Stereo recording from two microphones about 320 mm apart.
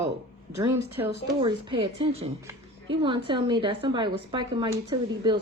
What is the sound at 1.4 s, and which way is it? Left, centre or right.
A woman's voice, centre.